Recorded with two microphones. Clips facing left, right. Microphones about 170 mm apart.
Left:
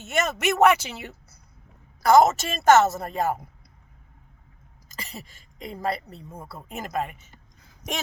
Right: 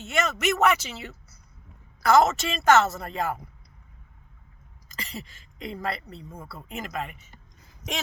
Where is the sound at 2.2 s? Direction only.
40° left (ahead or behind).